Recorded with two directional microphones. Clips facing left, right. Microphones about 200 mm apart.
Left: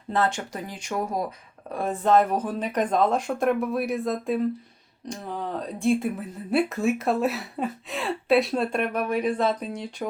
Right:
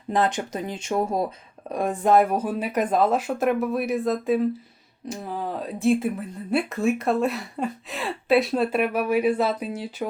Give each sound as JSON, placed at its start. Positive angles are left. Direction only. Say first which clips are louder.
{"t": 0.1, "sound": "speech", "louder": "right 2 dB", "side_deg": -15}
{"t": 1.7, "sound": "speech", "louder": "right 2 dB", "side_deg": -15}